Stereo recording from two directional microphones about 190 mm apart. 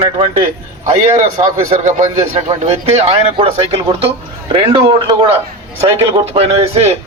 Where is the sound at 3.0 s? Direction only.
30° right (ahead or behind).